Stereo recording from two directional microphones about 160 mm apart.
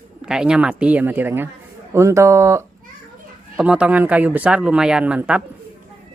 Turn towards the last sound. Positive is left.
turn(degrees=-5)  # may be behind; listen again after turning